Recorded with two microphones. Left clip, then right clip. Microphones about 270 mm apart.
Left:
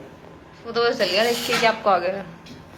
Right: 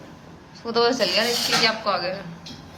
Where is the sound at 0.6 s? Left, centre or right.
Centre.